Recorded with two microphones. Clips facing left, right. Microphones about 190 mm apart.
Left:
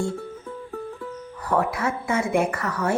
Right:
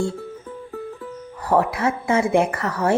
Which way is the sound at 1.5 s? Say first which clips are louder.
Right 4 dB; 25° right (ahead or behind).